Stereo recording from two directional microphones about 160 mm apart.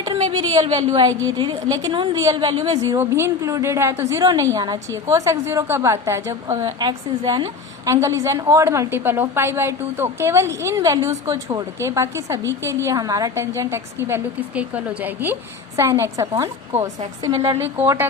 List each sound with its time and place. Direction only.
0.0 s a woman's voice: 35° right (ahead or behind); by 18.1 s 15° right (ahead or behind)